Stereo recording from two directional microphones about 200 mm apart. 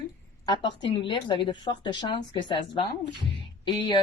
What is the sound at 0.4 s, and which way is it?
A woman's voice, 20° left (ahead or behind).